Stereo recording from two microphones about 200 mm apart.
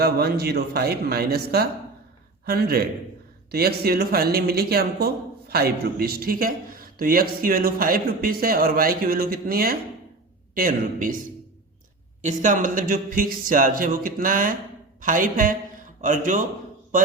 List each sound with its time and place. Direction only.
0.0 s speech: 50° right (ahead or behind)
12.2 s speech: 40° right (ahead or behind)